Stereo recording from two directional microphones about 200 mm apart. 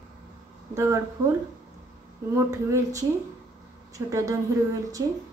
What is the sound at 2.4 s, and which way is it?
A woman's voice, 15° right (ahead or behind).